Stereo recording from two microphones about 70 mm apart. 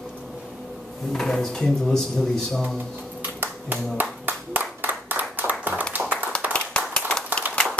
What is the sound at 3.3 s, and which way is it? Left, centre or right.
Clapping, right.